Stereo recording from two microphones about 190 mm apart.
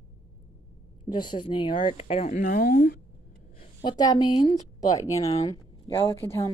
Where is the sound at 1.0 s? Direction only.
25° left (ahead or behind); by 3.0 s 50° left (ahead or behind).